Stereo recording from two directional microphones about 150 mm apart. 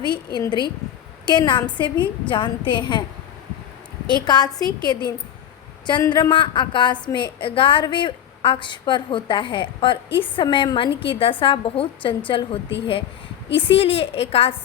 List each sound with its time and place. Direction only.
0.3 s a woman's voice: 30° left (ahead or behind)
4.0 s a woman's voice: 30° left (ahead or behind)
6.0 s a woman's voice: 25° left (ahead or behind)